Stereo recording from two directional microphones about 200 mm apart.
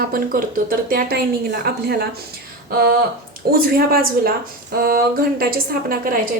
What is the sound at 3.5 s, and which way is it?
A woman's voice, 50° right (ahead or behind).